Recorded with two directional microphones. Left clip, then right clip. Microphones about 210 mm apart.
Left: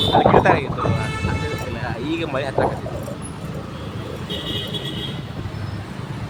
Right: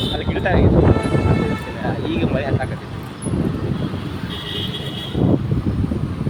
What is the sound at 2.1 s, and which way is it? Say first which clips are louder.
Speech: even; 15° left (ahead or behind).